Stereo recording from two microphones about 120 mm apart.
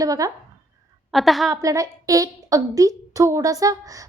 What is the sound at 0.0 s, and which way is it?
Speech, 30° right (ahead or behind).